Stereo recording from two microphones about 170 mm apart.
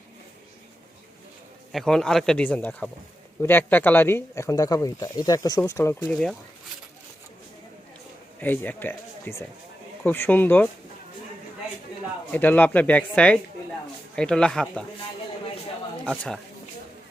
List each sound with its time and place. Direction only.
1.7 s speech: centre (ahead or behind)
8.4 s speech: 10° left (ahead or behind)
12.3 s speech: 10° left (ahead or behind)
16.0 s speech: 5° left (ahead or behind)